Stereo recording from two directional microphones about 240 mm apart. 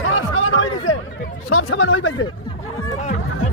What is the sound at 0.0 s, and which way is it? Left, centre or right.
Chatter, left.